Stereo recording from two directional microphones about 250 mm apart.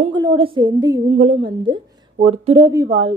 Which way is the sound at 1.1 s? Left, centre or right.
Right.